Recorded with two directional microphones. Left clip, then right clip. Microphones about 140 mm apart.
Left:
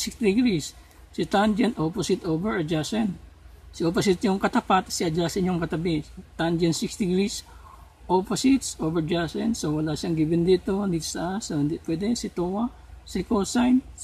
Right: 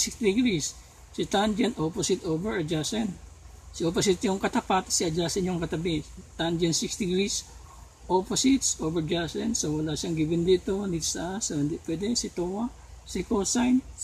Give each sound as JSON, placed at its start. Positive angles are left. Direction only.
{"t": 0.0, "sound": "speech", "side_deg": 25}